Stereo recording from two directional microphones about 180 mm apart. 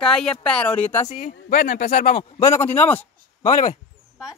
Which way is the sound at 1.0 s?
50° left (ahead or behind).